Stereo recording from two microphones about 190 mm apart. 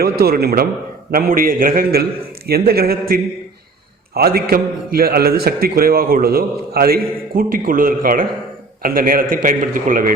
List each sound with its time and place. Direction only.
0.0 s a man's voice: 50° right (ahead or behind)